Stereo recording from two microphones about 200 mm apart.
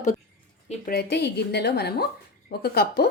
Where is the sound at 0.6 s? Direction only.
40° left (ahead or behind).